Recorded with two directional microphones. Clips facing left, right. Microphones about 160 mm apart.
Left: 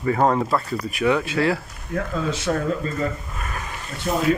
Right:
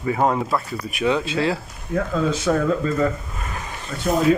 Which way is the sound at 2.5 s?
90° right.